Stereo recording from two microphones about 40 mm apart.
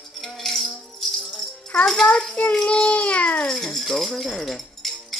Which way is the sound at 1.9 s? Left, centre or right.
Centre.